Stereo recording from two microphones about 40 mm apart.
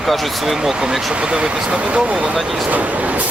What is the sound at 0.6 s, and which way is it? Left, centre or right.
Speech, centre.